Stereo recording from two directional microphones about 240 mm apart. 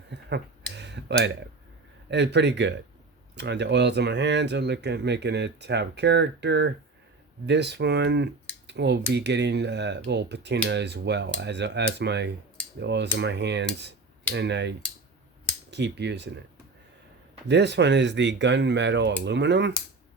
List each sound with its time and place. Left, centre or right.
0.1 s a sound: right
0.7 s tick-tock: right
2.0 s speech: right
17.5 s speech: right